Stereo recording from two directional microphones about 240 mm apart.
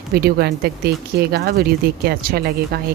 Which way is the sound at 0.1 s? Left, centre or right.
Right.